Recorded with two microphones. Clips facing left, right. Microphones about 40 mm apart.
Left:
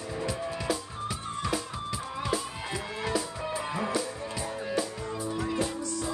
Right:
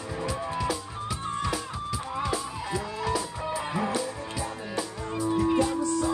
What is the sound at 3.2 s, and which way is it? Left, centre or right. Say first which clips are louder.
Music: right 1 dB; centre.